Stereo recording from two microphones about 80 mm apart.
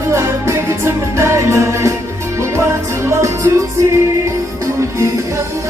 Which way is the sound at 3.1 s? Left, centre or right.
Right.